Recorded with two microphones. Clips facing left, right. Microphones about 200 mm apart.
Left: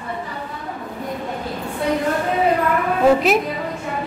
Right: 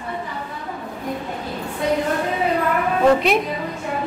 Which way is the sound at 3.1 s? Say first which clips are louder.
Left 1 dB; centre (ahead or behind).